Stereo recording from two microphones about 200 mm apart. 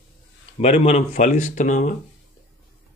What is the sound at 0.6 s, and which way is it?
A man's voice, 30° left (ahead or behind).